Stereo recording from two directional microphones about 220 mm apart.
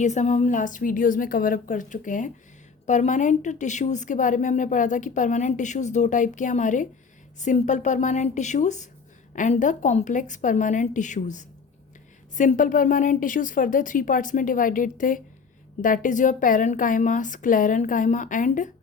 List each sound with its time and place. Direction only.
0.0 s a woman's voice: 30° left (ahead or behind)